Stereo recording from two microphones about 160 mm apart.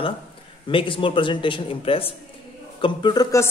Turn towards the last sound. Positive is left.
turn(degrees=20)  # may be behind; listen again after turning